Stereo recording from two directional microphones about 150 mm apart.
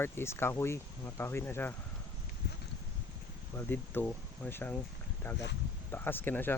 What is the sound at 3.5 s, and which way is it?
Speech, 15° left (ahead or behind).